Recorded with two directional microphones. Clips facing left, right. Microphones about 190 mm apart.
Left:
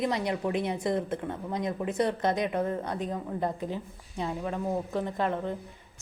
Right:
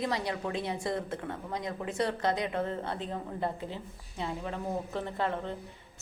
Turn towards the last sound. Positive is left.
turn(degrees=15)  # may be behind; listen again after turning